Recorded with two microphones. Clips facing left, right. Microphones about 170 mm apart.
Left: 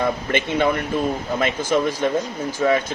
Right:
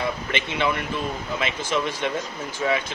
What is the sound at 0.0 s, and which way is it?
Speech, 45° left (ahead or behind).